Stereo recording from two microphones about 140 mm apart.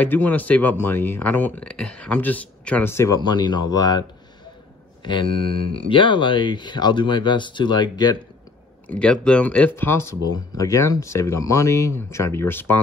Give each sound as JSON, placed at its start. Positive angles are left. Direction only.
{"t": 0.0, "sound": "speech", "side_deg": 10}
{"t": 3.2, "sound": "speech", "side_deg": 30}
{"t": 5.0, "sound": "speech", "side_deg": 35}
{"t": 8.8, "sound": "speech", "side_deg": 10}